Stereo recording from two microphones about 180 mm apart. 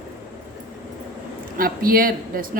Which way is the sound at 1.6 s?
55° right (ahead or behind).